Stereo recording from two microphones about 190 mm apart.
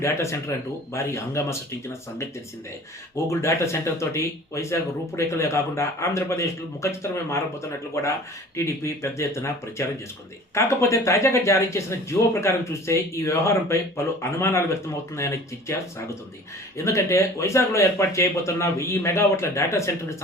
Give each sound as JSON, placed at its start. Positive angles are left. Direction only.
{"t": 0.0, "sound": "speech", "side_deg": 15}
{"t": 3.2, "sound": "speech", "side_deg": 15}
{"t": 16.7, "sound": "speech", "side_deg": 15}